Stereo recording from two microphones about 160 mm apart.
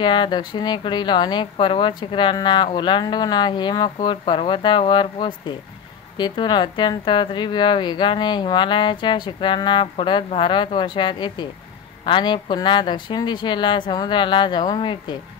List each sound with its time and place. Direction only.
0.0 s a woman's voice: 30° left (ahead or behind)